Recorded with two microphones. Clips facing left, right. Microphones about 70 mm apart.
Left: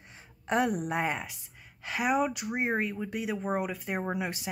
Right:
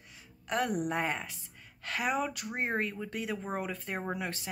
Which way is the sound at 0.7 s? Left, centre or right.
Centre.